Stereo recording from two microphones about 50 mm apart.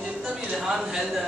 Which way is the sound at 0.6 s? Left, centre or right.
Centre.